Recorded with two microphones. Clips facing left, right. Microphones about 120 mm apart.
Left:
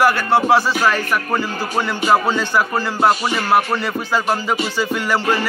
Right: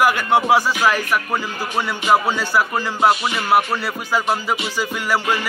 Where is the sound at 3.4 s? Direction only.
10° right (ahead or behind).